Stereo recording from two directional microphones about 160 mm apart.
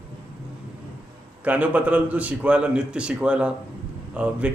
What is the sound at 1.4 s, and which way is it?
A man's voice, 10° right (ahead or behind).